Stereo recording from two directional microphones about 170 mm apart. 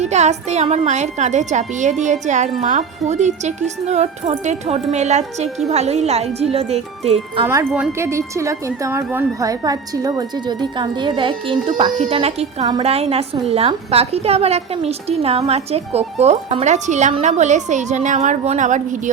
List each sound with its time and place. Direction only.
0.0 s a woman's voice: 40° right (ahead or behind)
7.4 s a woman's voice: 15° right (ahead or behind); by 19.1 s 45° right (ahead or behind)